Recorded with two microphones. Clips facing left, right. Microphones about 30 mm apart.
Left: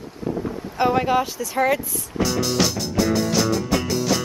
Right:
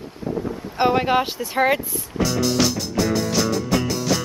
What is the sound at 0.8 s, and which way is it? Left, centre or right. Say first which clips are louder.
Speech: right 1 dB; right.